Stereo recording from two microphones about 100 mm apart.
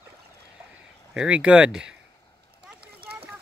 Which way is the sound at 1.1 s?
10° right (ahead or behind).